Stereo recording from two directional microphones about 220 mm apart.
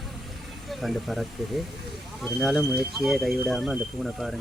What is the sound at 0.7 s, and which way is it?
Speech, centre (ahead or behind).